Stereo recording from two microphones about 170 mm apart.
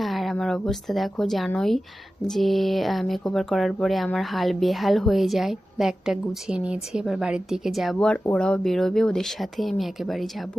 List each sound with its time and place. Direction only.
0.0 s speech: centre (ahead or behind)